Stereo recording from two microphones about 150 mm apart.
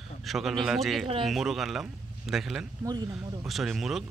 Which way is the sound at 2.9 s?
25° right (ahead or behind).